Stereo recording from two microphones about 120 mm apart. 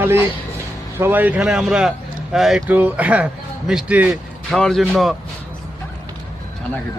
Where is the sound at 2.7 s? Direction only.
15° right (ahead or behind).